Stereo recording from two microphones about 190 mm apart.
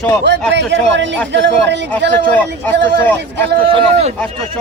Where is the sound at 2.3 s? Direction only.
10° left (ahead or behind).